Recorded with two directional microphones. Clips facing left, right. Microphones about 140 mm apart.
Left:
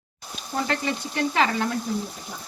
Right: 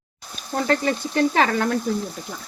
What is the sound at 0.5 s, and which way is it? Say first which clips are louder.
Frying: right 5 dB; 40° right (ahead or behind).